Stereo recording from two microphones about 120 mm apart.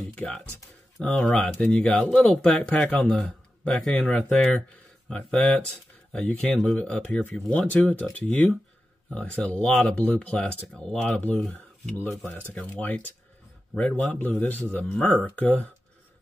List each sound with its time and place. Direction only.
0.1 s speech: 10° left (ahead or behind)